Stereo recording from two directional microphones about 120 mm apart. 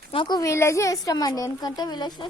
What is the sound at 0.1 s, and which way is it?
Speech, 45° left (ahead or behind).